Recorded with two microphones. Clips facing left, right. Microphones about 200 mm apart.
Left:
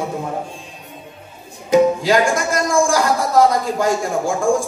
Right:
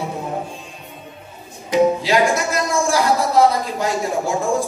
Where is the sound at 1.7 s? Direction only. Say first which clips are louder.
Left 2 dB; 50° left (ahead or behind).